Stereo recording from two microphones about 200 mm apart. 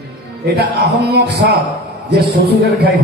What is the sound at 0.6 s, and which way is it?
Speech, 55° right (ahead or behind).